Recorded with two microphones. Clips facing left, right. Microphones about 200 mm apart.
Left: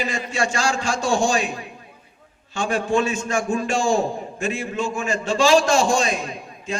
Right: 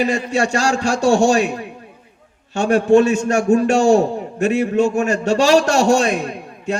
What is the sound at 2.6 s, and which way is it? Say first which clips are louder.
A man's voice: right 9 dB; 65° right (ahead or behind).